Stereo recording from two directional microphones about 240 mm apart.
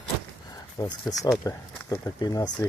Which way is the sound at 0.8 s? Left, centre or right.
Centre.